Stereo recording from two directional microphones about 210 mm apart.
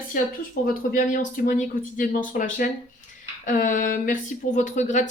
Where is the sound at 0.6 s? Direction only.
40° left (ahead or behind).